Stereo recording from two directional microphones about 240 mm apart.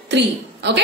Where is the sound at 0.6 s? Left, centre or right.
Right.